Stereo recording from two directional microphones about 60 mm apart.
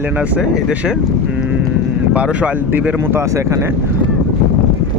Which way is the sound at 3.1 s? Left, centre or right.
Right.